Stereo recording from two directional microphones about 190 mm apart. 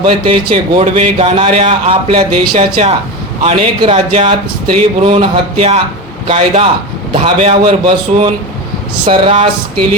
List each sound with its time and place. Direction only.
0.0 s a man's voice: 30° right (ahead or behind)